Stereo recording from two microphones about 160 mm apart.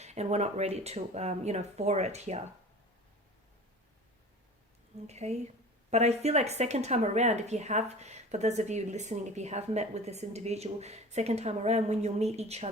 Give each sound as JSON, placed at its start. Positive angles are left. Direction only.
{"t": 0.0, "sound": "a woman's voice", "side_deg": -45}
{"t": 5.0, "sound": "a woman's voice", "side_deg": -45}